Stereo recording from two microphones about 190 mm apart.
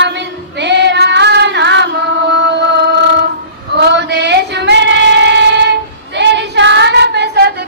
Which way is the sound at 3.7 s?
65° right (ahead or behind).